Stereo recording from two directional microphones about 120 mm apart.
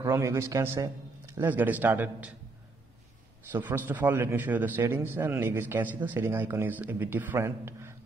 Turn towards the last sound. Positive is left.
turn(degrees=-25)  # may be behind; listen again after turning